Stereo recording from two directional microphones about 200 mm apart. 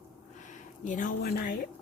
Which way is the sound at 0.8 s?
40° left (ahead or behind).